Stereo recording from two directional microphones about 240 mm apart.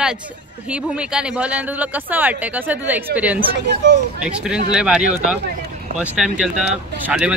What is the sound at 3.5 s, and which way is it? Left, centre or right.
Speech, right.